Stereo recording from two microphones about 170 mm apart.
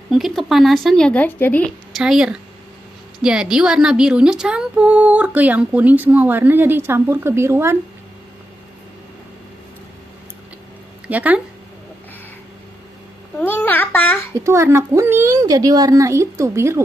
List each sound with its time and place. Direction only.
0.1 s speech: centre (ahead or behind)
2.0 s a woman's voice: 5° right (ahead or behind)
11.1 s a woman's voice: 10° right (ahead or behind)
13.4 s babbling: 10° left (ahead or behind)
14.4 s a woman's voice: 15° right (ahead or behind)